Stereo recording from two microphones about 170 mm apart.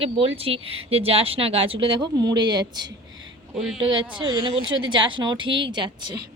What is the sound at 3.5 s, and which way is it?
Speech, centre (ahead or behind).